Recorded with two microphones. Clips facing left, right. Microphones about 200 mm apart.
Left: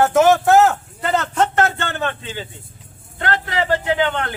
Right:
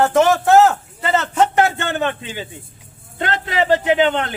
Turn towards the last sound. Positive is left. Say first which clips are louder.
# right 4 dB
turn(degrees=-20)  # may be behind; listen again after turning